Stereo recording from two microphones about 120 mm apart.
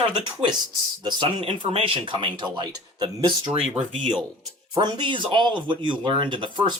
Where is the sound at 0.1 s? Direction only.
40° right (ahead or behind).